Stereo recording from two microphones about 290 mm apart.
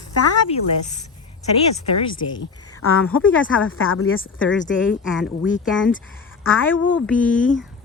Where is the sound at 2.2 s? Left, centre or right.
Left.